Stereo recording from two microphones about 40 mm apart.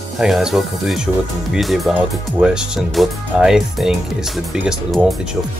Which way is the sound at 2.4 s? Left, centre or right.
Centre.